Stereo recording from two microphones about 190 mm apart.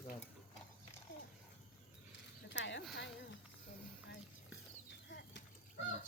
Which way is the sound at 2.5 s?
70° left (ahead or behind).